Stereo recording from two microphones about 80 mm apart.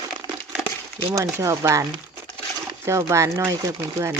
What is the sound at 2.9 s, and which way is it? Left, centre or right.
Speech, right.